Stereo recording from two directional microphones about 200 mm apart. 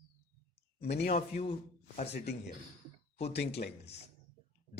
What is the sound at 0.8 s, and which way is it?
Speech, 55° left (ahead or behind).